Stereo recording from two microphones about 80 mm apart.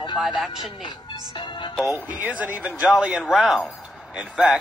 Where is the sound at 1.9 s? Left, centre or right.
Right.